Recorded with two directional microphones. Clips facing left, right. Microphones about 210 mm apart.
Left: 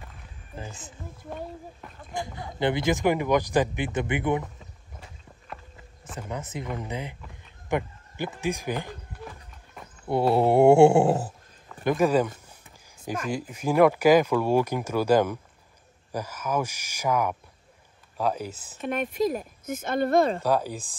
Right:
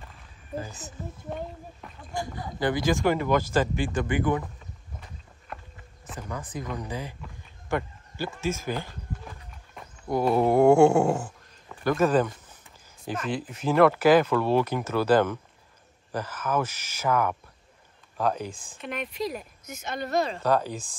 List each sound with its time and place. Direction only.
2.1 s speech: 25° left (ahead or behind)
6.1 s speech: 20° left (ahead or behind)
10.0 s speech: 30° left (ahead or behind)
11.0 s a sound: 35° left (ahead or behind)
11.8 s speech: 15° left (ahead or behind)
18.8 s speech: 45° left (ahead or behind)
20.4 s speech: 10° left (ahead or behind)